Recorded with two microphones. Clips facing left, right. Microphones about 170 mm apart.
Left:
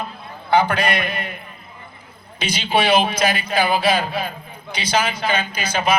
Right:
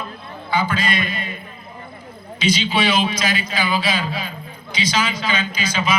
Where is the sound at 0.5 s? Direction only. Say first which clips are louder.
Left 4 dB; 65° left (ahead or behind).